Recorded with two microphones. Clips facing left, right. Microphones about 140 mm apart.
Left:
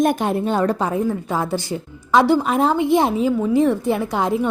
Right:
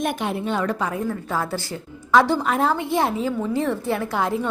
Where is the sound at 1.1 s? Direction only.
20° left (ahead or behind).